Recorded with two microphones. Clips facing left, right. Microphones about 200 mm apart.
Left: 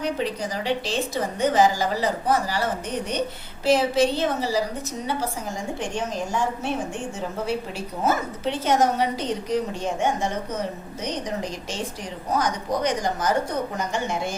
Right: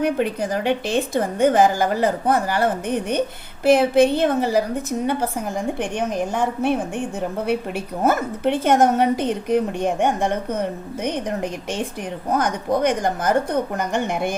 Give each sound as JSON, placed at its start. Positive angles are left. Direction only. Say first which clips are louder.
{"t": 0.0, "sound": "a woman's voice", "louder": "right 5 dB", "side_deg": -55}